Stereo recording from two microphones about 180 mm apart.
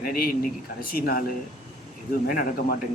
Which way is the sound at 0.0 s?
55° left (ahead or behind).